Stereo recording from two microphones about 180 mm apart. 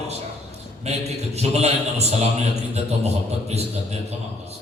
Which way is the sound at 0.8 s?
35° right (ahead or behind).